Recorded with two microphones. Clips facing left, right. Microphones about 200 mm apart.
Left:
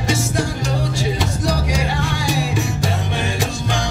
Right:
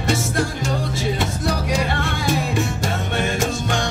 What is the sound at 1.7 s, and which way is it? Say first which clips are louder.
Music: even; centre (ahead or behind).